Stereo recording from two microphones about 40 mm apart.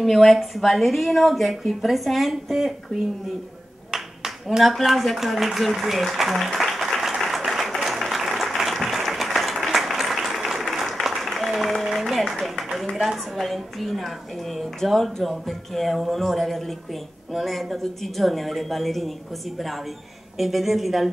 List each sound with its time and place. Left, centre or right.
0.0 s a woman's voice: centre
4.5 s a sound: centre
13.4 s a woman's voice: centre
20.3 s a woman's voice: centre